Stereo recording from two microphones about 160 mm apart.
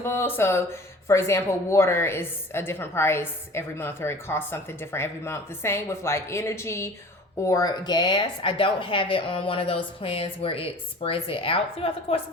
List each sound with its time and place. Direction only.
0.0 s a woman's voice: 15° left (ahead or behind); by 12.1 s 35° left (ahead or behind)